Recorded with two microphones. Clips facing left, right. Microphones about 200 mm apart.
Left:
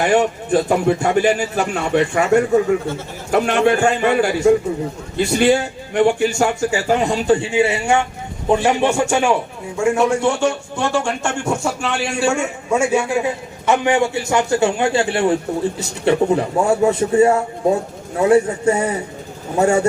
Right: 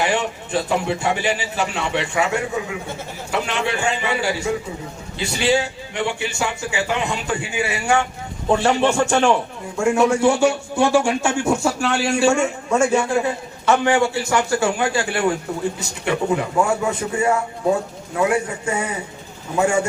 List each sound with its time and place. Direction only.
0.0 s a man's voice: 50° left (ahead or behind); by 9.3 s 10° left (ahead or behind)
9.7 s a man's voice: centre (ahead or behind); by 19.8 s 40° left (ahead or behind)